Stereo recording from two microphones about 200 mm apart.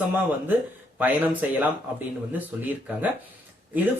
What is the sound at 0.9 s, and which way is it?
Speech, 10° right (ahead or behind).